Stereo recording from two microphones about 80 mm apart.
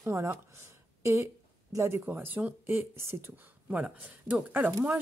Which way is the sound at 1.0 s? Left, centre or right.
Right.